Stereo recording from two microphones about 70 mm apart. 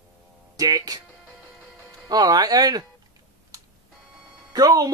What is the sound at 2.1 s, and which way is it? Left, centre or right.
Speech, right.